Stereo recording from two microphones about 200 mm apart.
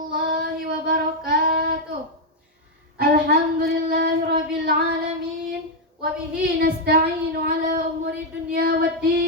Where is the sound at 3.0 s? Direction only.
50° right (ahead or behind).